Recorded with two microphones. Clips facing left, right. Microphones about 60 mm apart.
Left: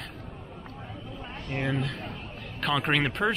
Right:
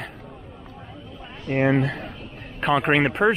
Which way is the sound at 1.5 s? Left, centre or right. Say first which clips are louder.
Right 10 dB; right.